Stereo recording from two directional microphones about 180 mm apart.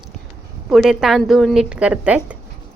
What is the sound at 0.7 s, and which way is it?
A woman's voice, centre (ahead or behind).